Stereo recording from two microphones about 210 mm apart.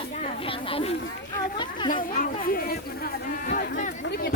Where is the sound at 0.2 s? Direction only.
25° left (ahead or behind).